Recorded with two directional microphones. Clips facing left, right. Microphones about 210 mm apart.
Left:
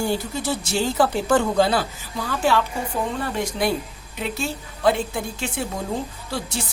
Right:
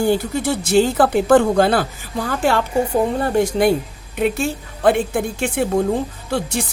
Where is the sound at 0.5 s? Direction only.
55° right (ahead or behind).